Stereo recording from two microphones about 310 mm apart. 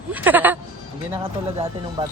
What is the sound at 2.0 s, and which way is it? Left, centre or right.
Speech, centre.